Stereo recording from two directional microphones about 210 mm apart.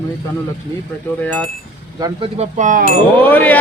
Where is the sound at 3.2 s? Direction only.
10° left (ahead or behind).